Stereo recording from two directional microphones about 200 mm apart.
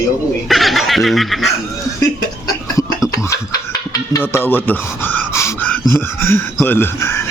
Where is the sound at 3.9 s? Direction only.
15° left (ahead or behind).